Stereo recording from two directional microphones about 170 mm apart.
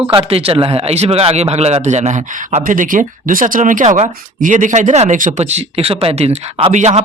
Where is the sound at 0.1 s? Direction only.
35° right (ahead or behind).